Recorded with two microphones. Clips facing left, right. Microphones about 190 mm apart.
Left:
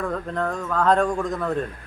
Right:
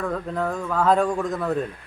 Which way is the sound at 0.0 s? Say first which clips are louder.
Even; 5° right (ahead or behind).